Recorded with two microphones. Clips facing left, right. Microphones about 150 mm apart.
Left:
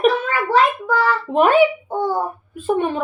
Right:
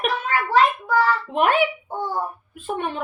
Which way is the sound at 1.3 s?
40° left (ahead or behind).